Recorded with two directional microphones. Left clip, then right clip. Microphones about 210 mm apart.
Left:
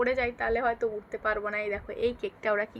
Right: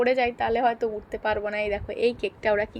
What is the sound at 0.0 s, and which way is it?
A woman's voice, 10° right (ahead or behind).